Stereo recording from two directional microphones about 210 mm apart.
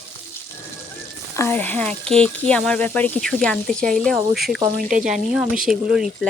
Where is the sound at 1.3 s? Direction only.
10° left (ahead or behind).